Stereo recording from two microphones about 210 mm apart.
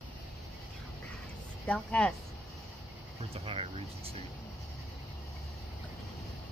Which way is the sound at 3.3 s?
25° right (ahead or behind).